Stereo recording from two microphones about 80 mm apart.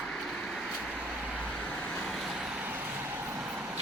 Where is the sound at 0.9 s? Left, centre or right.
Centre.